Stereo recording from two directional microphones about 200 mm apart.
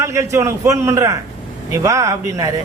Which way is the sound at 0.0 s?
15° right (ahead or behind).